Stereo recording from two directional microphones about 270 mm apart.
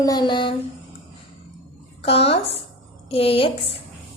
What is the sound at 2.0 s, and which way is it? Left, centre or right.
A woman's voice, left.